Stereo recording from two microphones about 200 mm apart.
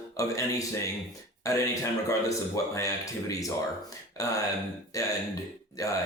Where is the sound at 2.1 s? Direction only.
15° left (ahead or behind).